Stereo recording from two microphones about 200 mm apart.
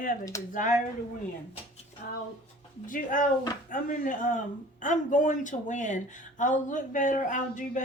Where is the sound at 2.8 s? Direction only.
40° left (ahead or behind).